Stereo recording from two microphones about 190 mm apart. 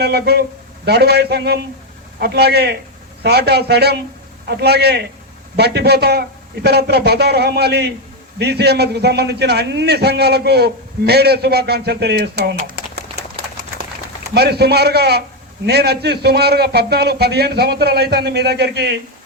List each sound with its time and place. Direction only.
0.0 s a man's voice: 60° right (ahead or behind)
12.6 s a sound: 55° right (ahead or behind)
14.3 s a man's voice: 55° right (ahead or behind)